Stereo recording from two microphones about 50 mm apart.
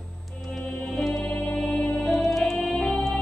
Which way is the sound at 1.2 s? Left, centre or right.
Left.